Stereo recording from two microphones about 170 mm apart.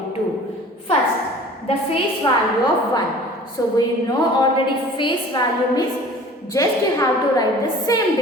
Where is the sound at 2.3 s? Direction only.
25° left (ahead or behind).